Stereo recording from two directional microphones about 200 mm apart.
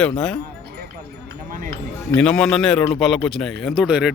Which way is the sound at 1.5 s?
45° right (ahead or behind).